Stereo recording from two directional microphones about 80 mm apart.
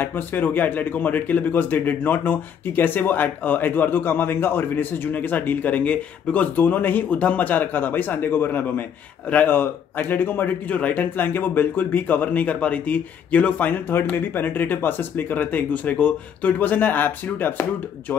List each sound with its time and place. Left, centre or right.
0.0 s a man's voice: left